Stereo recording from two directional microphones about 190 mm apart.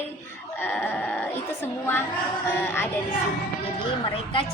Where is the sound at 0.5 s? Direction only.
10° left (ahead or behind).